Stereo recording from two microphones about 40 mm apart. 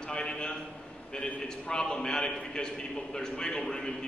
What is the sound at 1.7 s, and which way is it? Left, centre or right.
A man's voice, centre.